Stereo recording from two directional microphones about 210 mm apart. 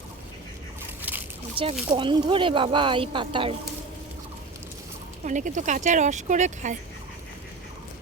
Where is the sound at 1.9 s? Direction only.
25° right (ahead or behind).